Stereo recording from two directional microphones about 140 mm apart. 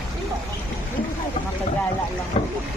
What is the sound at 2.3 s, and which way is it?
Speech, 45° left (ahead or behind).